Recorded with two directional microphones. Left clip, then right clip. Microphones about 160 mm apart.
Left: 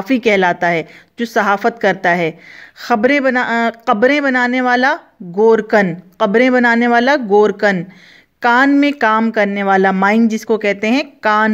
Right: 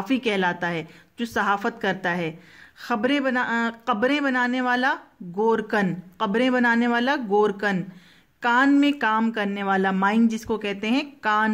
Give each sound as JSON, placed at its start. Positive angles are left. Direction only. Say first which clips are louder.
{"t": 0.0, "sound": "speech", "louder": "left 10 dB", "side_deg": 35}